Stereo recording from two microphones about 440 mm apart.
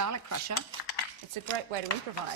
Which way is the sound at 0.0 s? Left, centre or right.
Right.